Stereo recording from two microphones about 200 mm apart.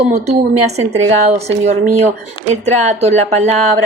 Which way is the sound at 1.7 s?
35° right (ahead or behind).